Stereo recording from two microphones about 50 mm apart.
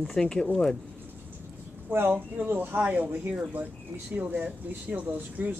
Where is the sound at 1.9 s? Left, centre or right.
Right.